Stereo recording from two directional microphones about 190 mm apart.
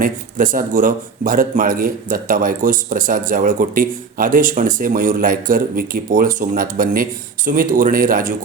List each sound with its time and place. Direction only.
0.0 s speech: 45° right (ahead or behind)